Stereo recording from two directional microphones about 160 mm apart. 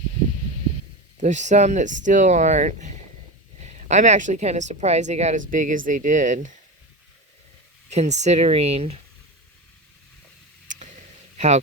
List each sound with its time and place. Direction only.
1.2 s a woman's voice: 50° right (ahead or behind)
7.9 s a woman's voice: 45° right (ahead or behind)
11.3 s a man's voice: 45° right (ahead or behind)